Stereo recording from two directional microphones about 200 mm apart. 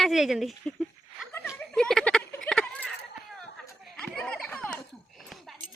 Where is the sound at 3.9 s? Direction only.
5° left (ahead or behind).